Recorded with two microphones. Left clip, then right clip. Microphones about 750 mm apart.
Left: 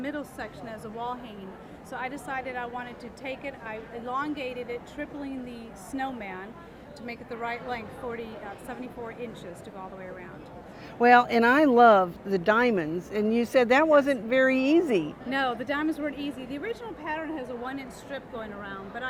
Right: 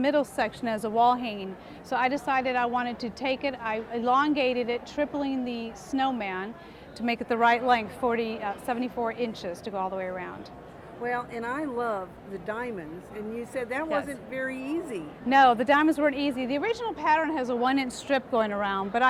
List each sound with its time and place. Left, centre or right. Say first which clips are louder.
0.0 s a woman's voice: right 10 dB; right
7.0 s a woman's voice: right 12 dB; right
11.0 s speech: left 12 dB; left
15.3 s speech: right 10 dB; right
16.1 s a woman's voice: right 7 dB; right
18.1 s speech: right 12 dB; right